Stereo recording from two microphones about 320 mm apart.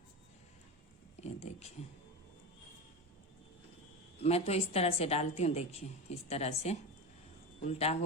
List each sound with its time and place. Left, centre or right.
1.2 s a woman's voice: centre
4.2 s a woman's voice: centre